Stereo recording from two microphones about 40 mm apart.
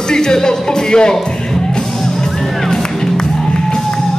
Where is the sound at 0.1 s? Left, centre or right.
Centre.